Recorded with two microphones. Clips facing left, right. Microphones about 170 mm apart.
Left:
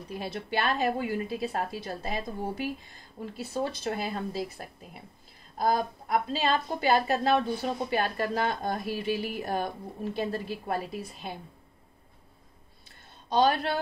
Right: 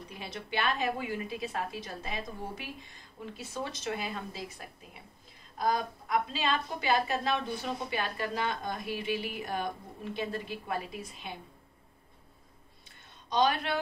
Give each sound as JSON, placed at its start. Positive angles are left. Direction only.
{"t": 0.2, "sound": "a woman's voice", "side_deg": 40}
{"t": 13.3, "sound": "a woman's voice", "side_deg": 35}